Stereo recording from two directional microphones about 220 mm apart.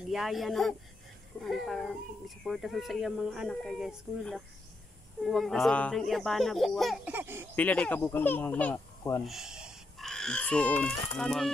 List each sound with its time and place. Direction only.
0.1 s speech: centre (ahead or behind)
7.5 s speech: 5° left (ahead or behind)
9.2 s speech: centre (ahead or behind)